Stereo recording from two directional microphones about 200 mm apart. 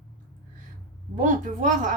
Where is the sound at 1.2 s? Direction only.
40° right (ahead or behind).